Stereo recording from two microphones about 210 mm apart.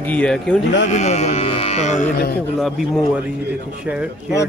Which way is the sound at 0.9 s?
35° left (ahead or behind).